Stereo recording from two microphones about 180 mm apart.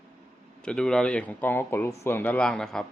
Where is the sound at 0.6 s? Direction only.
5° left (ahead or behind).